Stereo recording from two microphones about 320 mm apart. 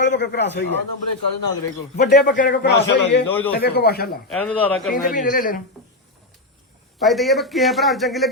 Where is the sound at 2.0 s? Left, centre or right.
Left.